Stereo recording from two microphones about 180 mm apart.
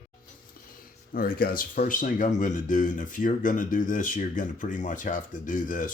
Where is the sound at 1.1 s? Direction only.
55° left (ahead or behind).